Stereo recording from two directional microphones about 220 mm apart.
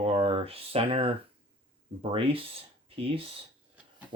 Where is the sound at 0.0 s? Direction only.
25° right (ahead or behind).